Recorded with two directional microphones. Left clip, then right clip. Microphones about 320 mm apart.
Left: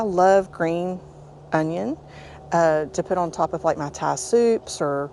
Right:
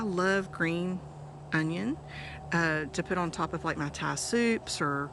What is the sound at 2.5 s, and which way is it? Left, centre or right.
Speech, centre.